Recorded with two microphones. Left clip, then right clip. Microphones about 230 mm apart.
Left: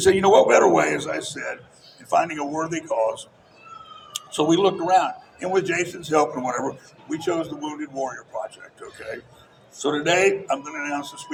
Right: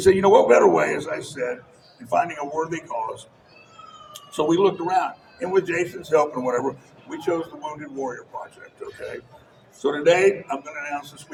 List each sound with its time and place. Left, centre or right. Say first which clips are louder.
0.0 s a man's voice: even; left